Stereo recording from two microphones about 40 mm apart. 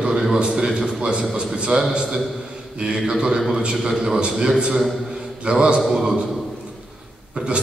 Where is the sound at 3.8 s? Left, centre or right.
Centre.